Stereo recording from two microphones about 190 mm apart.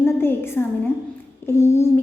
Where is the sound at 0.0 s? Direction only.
10° left (ahead or behind).